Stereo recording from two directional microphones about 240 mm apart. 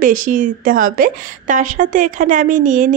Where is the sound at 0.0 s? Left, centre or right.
Right.